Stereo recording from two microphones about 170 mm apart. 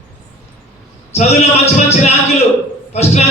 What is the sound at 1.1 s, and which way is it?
Speech, 40° left (ahead or behind).